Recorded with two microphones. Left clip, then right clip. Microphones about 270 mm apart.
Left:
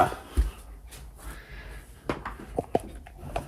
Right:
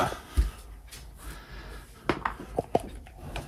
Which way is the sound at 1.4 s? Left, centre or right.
Centre.